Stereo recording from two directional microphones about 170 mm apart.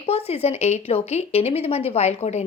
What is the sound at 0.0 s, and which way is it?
Speech, 35° left (ahead or behind).